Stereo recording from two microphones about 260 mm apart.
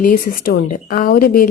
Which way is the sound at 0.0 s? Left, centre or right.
Left.